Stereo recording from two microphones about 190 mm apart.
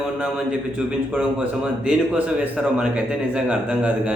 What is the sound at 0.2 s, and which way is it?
A man's voice, 5° right (ahead or behind).